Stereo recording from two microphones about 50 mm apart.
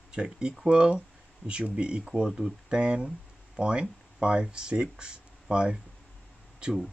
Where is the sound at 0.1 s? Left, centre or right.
Centre.